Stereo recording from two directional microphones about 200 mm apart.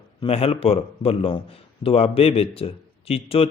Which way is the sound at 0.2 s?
30° left (ahead or behind).